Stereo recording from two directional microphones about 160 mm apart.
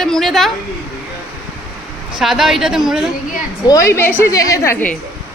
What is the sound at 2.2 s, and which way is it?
Speech, centre (ahead or behind).